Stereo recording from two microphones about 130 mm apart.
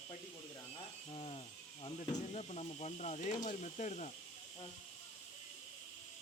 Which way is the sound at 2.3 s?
55° left (ahead or behind).